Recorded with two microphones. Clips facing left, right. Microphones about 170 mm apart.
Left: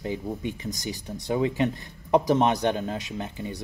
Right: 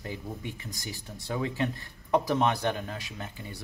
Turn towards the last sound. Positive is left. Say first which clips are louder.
# left 8 dB
turn(degrees=20)  # may be behind; listen again after turning